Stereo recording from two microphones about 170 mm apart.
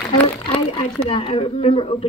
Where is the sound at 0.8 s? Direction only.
30° left (ahead or behind).